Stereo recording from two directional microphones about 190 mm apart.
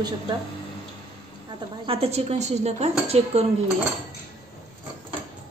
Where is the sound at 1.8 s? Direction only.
30° right (ahead or behind).